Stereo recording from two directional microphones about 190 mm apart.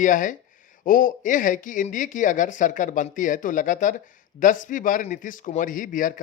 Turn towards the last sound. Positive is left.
turn(degrees=45)  # may be behind; listen again after turning